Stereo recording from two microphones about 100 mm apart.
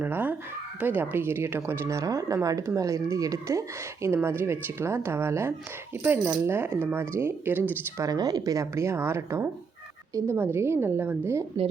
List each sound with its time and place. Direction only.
0.0 s speech: 20° right (ahead or behind)
8.0 s speech: 40° right (ahead or behind); by 11.2 s 20° right (ahead or behind)